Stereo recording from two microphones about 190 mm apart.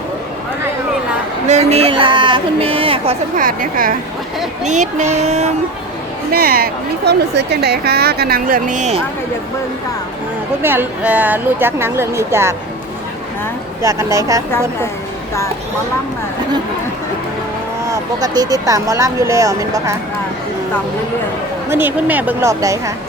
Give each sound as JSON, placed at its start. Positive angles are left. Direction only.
{"t": 1.5, "sound": "speech", "side_deg": -35}
{"t": 3.3, "sound": "speech", "side_deg": -45}
{"t": 6.3, "sound": "speech", "side_deg": -50}
{"t": 10.6, "sound": "speech", "side_deg": -10}
{"t": 13.8, "sound": "speech", "side_deg": -15}
{"t": 17.8, "sound": "speech", "side_deg": -20}
{"t": 21.7, "sound": "speech", "side_deg": -10}